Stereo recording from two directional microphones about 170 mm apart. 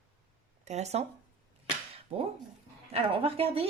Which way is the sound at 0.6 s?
40° right (ahead or behind).